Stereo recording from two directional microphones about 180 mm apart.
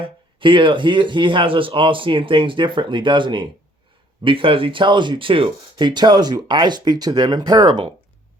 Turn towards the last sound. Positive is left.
turn(degrees=-25)  # may be behind; listen again after turning